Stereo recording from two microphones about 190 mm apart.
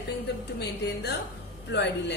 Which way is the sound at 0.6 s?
65° left (ahead or behind).